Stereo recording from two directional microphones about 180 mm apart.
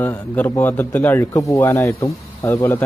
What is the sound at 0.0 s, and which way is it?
A man's voice, 10° left (ahead or behind).